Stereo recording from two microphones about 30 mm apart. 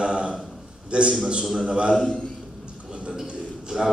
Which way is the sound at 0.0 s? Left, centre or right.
Right.